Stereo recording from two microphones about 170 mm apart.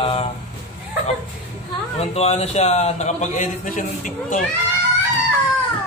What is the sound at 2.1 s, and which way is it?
A man's voice, 40° left (ahead or behind).